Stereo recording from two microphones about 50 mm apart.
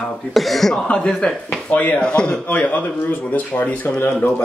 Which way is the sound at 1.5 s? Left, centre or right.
Left.